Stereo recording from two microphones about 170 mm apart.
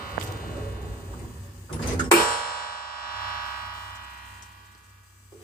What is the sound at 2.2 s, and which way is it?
Music, 60° left (ahead or behind).